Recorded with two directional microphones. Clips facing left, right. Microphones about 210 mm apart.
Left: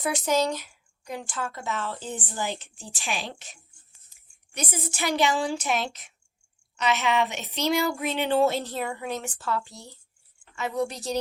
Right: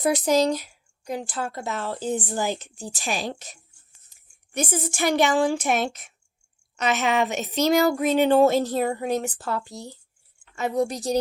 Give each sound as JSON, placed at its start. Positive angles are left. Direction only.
{"t": 0.0, "sound": "speech", "side_deg": -35}
{"t": 4.5, "sound": "a sound", "side_deg": -45}
{"t": 10.5, "sound": "speech", "side_deg": -40}